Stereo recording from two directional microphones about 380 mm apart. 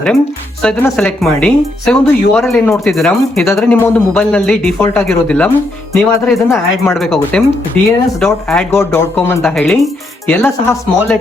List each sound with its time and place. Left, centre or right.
0.6 s speech: centre